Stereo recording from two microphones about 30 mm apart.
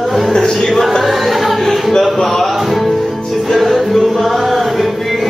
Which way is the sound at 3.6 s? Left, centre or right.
Centre.